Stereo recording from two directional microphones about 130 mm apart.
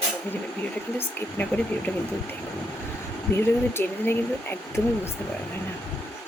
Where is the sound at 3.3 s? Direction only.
15° left (ahead or behind).